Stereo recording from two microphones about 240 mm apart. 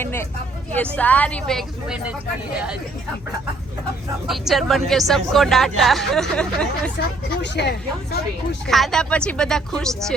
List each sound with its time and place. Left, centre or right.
0.0 s speech: centre
4.3 s speech: centre
7.4 s speech: left
8.6 s speech: centre